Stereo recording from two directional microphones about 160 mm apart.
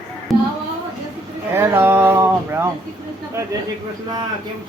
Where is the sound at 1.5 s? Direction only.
15° right (ahead or behind).